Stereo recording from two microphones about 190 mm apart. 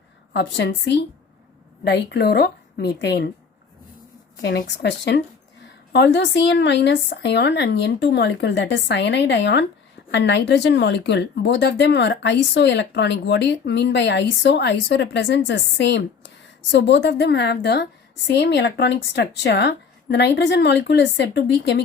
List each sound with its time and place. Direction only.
0.3 s speech: 70° left (ahead or behind)
4.4 s speech: 70° left (ahead or behind)